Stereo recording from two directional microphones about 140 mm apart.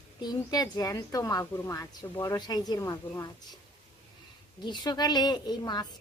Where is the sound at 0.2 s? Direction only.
30° left (ahead or behind).